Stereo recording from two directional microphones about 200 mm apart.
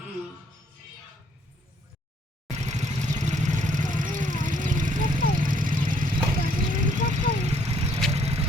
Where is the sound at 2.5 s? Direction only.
35° right (ahead or behind).